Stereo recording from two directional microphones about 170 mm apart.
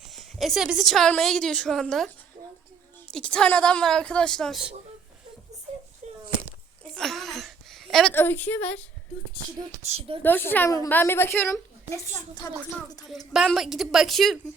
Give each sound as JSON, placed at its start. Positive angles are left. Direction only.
{"t": 0.1, "sound": "a woman's voice", "side_deg": 0}
{"t": 6.0, "sound": "a sound", "side_deg": -45}
{"t": 6.9, "sound": "a sound", "side_deg": 0}
{"t": 8.1, "sound": "a woman's voice", "side_deg": 10}
{"t": 9.8, "sound": "speech", "side_deg": -40}
{"t": 10.2, "sound": "a woman's voice", "side_deg": 10}
{"t": 13.1, "sound": "a woman's voice", "side_deg": 0}